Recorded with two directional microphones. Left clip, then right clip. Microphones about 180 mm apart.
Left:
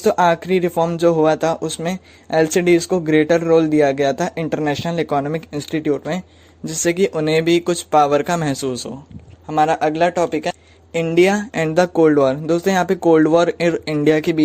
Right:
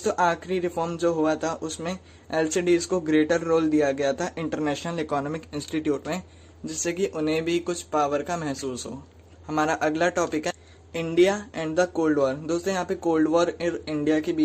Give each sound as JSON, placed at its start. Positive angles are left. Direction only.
{"t": 0.0, "sound": "a man's voice", "side_deg": 40}
{"t": 6.7, "sound": "speech", "side_deg": 45}
{"t": 9.5, "sound": "speech", "side_deg": 25}
{"t": 10.9, "sound": "speech", "side_deg": 40}